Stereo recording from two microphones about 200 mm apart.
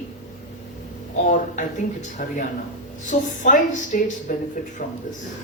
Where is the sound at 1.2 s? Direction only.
35° left (ahead or behind).